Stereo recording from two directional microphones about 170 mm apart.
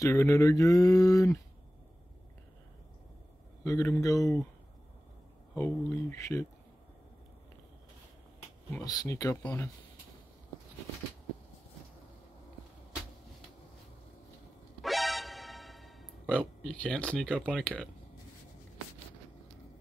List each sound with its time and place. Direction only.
0.0 s speech: 15° left (ahead or behind)
3.6 s a man's voice: 20° left (ahead or behind)
5.5 s speech: 15° left (ahead or behind)
8.6 s speech: 20° left (ahead or behind)
14.8 s music: centre (ahead or behind)